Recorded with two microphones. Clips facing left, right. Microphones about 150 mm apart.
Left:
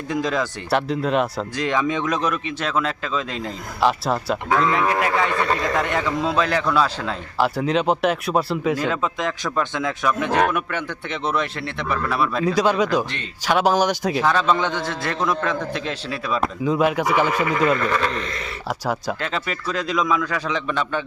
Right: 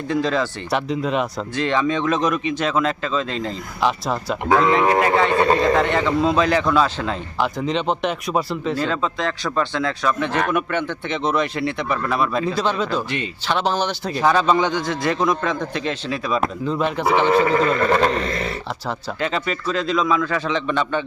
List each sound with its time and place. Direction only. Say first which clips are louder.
0.3 s speech: right 1 dB; centre (ahead or behind)
4.4 s speech: right 4 dB; 30° right (ahead or behind)
4.9 s speech: right 4 dB; centre (ahead or behind)
5.3 s speech: right 5 dB; 30° right (ahead or behind)
5.7 s speech: right 4 dB; 5° left (ahead or behind)
8.7 s speech: even; 10° left (ahead or behind)
14.1 s speech: right 2 dB; centre (ahead or behind)
17.3 s a man's voice: right 3 dB; 35° right (ahead or behind)
19.2 s speech: right 3 dB; centre (ahead or behind)